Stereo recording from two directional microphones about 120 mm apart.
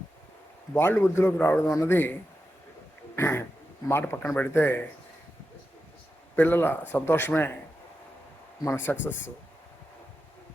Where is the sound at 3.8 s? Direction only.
20° left (ahead or behind).